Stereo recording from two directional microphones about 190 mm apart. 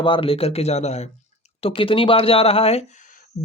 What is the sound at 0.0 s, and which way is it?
Speech, 25° left (ahead or behind).